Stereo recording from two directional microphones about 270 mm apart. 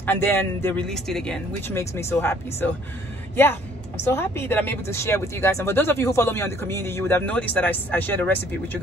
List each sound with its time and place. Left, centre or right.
0.0 s speech: centre